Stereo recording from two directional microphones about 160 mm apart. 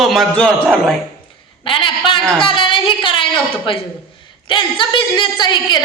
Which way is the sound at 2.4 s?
30° left (ahead or behind).